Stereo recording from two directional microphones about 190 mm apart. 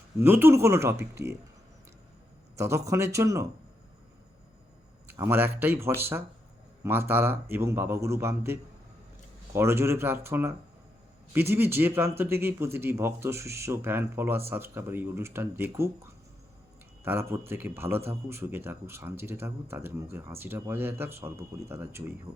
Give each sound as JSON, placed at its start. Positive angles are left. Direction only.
{"t": 0.2, "sound": "a man's voice", "side_deg": -10}
{"t": 2.6, "sound": "a man's voice", "side_deg": -15}
{"t": 5.0, "sound": "a man's voice", "side_deg": -15}
{"t": 9.6, "sound": "a man's voice", "side_deg": -15}
{"t": 17.0, "sound": "a man's voice", "side_deg": -10}